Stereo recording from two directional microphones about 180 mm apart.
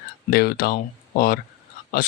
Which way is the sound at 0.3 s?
60° left (ahead or behind).